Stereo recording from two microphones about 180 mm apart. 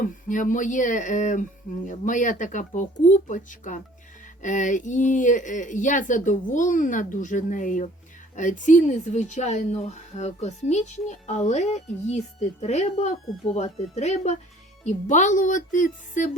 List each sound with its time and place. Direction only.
0.0 s speech: 45° left (ahead or behind)